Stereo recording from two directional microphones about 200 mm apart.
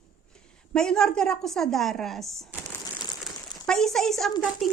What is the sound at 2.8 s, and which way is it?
Crumpling, 20° left (ahead or behind).